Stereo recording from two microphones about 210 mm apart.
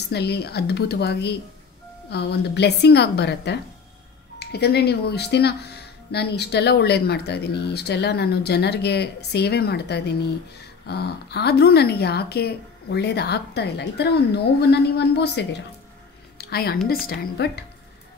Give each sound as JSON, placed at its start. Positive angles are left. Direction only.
{"t": 0.1, "sound": "speech", "side_deg": 50}
{"t": 16.3, "sound": "a sound", "side_deg": 50}
{"t": 17.0, "sound": "speech", "side_deg": 45}